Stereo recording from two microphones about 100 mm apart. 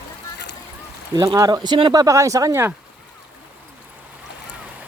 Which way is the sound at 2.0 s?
30° right (ahead or behind).